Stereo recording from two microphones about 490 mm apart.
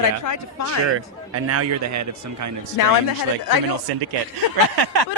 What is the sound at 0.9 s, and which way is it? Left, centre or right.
A man's voice, right.